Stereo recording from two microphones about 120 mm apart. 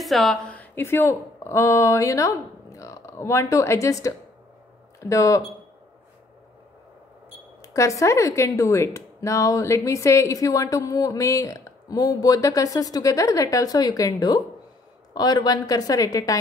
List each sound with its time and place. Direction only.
0.0 s a woman's voice: centre (ahead or behind); by 5.4 s 25° left (ahead or behind)
7.7 s a woman's voice: 25° left (ahead or behind)